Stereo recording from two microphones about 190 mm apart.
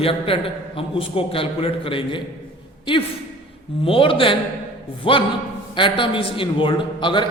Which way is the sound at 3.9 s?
30° left (ahead or behind).